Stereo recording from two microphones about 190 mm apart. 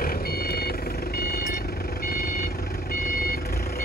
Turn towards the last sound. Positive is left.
turn(degrees=55)  # may be behind; listen again after turning